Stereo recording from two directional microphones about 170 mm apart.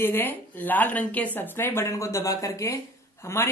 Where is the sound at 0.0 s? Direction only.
10° left (ahead or behind).